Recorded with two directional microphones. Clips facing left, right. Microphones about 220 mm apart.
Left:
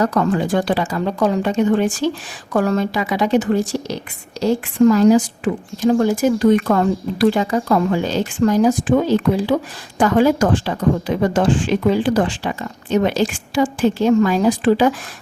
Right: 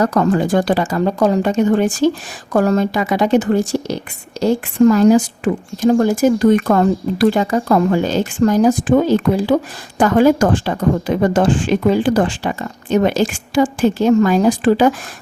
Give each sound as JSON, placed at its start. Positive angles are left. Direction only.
{"t": 0.0, "sound": "speech", "side_deg": -45}